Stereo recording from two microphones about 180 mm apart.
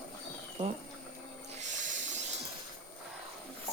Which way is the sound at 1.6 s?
45° right (ahead or behind).